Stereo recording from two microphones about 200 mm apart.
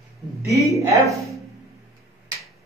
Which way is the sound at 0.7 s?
15° right (ahead or behind).